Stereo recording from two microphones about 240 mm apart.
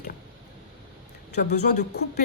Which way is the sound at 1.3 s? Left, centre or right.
Left.